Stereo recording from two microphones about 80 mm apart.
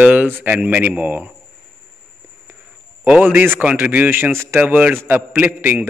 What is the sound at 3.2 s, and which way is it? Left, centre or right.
A man's voice, right.